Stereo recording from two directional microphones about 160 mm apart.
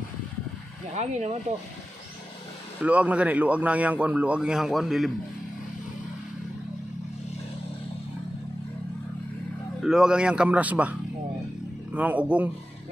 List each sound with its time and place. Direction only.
0.9 s speech: 45° right (ahead or behind)
2.8 s speech: 10° right (ahead or behind)
9.8 s speech: 5° right (ahead or behind)